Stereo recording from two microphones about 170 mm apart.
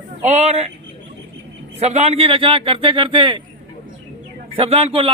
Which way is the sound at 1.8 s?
40° right (ahead or behind).